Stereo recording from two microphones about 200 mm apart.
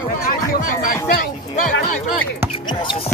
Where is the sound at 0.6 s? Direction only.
40° left (ahead or behind).